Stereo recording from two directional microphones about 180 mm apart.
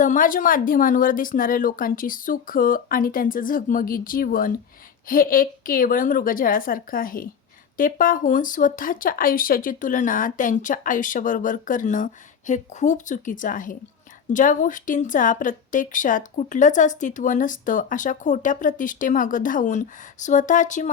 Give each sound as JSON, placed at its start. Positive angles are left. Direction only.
{"t": 0.0, "sound": "a woman's voice", "side_deg": 45}